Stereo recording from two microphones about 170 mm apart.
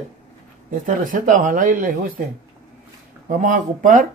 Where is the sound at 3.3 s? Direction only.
50° right (ahead or behind).